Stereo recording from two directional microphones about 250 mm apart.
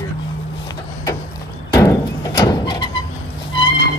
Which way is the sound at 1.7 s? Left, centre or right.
Centre.